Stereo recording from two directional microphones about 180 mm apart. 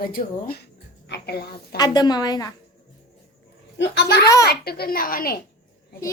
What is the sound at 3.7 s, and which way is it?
A woman's voice, 70° left (ahead or behind).